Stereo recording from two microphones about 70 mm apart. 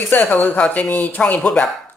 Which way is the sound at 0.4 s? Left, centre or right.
Left.